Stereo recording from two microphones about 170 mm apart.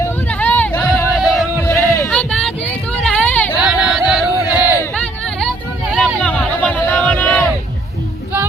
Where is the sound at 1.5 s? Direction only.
15° left (ahead or behind); by 6.1 s 5° right (ahead or behind).